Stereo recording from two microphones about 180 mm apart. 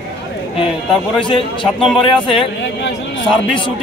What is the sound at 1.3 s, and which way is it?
Speech, 30° left (ahead or behind).